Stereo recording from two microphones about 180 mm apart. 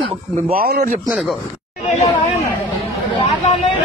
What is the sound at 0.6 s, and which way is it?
Speech, 65° right (ahead or behind).